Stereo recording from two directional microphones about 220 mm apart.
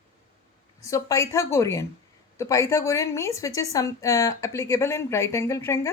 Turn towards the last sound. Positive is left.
turn(degrees=10)  # may be behind; listen again after turning